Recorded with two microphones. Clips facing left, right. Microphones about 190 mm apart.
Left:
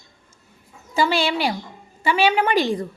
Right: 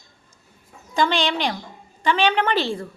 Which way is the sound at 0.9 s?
5° left (ahead or behind).